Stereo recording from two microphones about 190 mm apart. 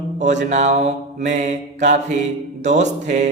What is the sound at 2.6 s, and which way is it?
Speech, 40° right (ahead or behind).